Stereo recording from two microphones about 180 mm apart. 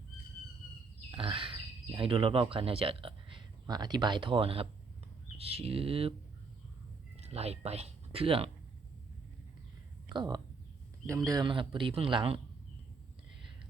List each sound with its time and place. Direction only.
1.1 s speech: 30° right (ahead or behind)
7.2 s speech: 35° right (ahead or behind)
10.1 s speech: 25° right (ahead or behind)